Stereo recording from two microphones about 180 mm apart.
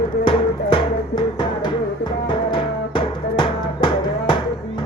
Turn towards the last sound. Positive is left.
turn(degrees=25)  # may be behind; listen again after turning